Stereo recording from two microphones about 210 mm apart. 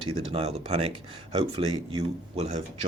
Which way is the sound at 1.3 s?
20° right (ahead or behind).